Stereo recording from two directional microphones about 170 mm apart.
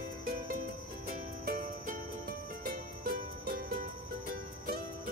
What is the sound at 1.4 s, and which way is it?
Music, 55° right (ahead or behind).